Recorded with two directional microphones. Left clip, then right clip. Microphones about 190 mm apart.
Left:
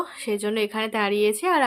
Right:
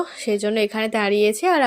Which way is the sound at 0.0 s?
15° right (ahead or behind).